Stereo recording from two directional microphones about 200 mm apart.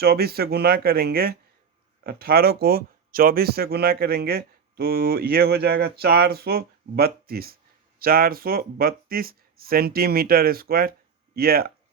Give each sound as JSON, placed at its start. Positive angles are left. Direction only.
{"t": 0.0, "sound": "speech", "side_deg": -50}